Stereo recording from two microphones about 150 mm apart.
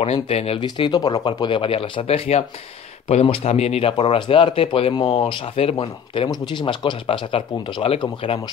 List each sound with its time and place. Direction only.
0.0 s speech: 45° left (ahead or behind)
0.7 s speech: 30° left (ahead or behind)